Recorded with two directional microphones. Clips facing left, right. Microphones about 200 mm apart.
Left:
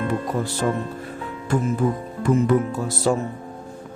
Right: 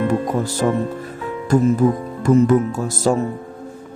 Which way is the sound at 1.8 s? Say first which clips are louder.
Right 5 dB; 40° right (ahead or behind).